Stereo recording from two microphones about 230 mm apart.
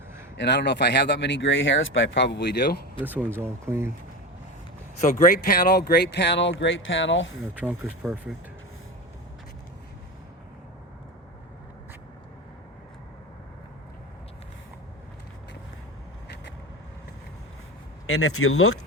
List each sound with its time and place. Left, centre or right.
0.3 s speech: left
3.0 s speech: centre
4.9 s speech: left
7.4 s speech: centre
18.0 s speech: left